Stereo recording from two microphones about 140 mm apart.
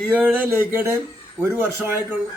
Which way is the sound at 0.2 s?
10° right (ahead or behind).